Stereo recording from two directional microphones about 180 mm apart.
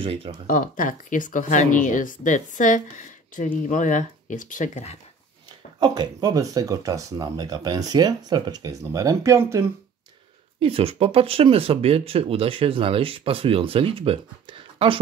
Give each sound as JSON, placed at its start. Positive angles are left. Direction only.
{"t": 0.0, "sound": "speech", "side_deg": -30}
{"t": 0.5, "sound": "speech", "side_deg": 45}
{"t": 5.8, "sound": "speech", "side_deg": -20}
{"t": 10.6, "sound": "speech", "side_deg": -30}